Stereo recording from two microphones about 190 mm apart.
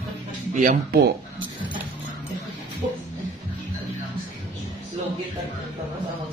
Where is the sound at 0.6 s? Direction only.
45° right (ahead or behind).